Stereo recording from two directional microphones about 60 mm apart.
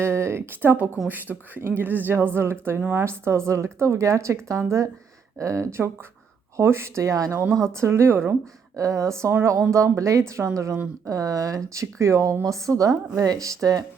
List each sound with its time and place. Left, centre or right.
0.0 s a woman's voice: right
8.7 s a woman's voice: right
11.0 s speech: right
13.1 s speech: right